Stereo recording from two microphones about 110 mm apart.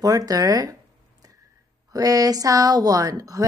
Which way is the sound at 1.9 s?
35° right (ahead or behind).